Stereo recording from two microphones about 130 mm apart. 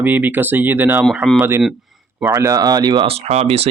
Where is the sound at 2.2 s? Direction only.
20° right (ahead or behind).